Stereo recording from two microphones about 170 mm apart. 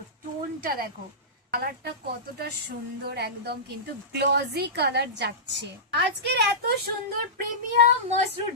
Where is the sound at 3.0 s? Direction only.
70° right (ahead or behind).